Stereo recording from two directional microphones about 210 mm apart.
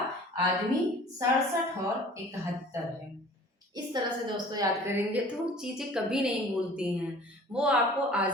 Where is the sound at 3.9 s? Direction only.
20° right (ahead or behind).